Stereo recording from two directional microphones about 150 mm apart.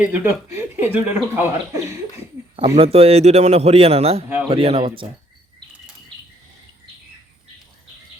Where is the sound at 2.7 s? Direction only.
40° right (ahead or behind).